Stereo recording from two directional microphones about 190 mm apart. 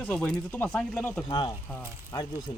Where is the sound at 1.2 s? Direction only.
25° left (ahead or behind).